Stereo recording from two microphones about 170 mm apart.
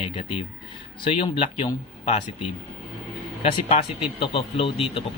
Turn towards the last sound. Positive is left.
turn(degrees=35)  # may be behind; listen again after turning